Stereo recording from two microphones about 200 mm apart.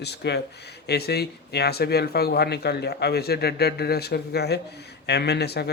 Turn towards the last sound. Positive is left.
turn(degrees=55)  # may be behind; listen again after turning